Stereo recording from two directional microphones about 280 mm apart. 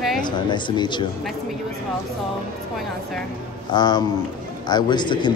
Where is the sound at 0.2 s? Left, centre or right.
Centre.